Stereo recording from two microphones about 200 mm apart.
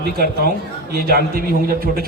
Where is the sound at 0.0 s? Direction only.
50° right (ahead or behind).